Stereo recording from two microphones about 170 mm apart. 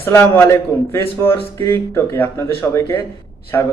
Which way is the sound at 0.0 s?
15° left (ahead or behind).